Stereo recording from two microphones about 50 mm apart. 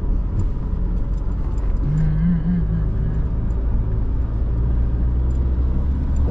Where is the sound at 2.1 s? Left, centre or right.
Centre.